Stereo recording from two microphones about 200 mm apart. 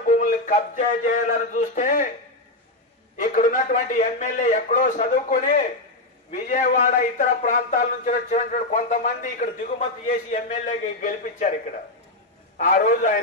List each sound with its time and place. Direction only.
0.0 s a sound: 40° left (ahead or behind)
1.6 s a man's voice: 45° left (ahead or behind)
3.2 s a man's voice: 40° left (ahead or behind)
12.5 s a man's voice: 40° left (ahead or behind)